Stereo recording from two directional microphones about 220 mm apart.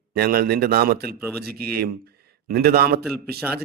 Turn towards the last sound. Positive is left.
turn(degrees=0)  # may be behind; listen again after turning